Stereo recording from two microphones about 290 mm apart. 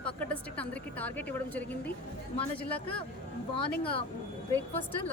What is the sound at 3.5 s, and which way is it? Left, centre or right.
Speech, centre.